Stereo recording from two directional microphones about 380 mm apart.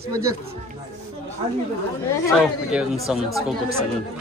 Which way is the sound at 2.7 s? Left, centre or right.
Centre.